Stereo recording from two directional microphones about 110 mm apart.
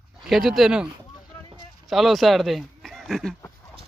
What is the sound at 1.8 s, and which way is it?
Speech, centre (ahead or behind).